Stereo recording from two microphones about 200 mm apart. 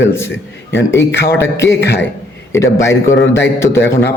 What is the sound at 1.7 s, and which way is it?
Speech, 60° left (ahead or behind).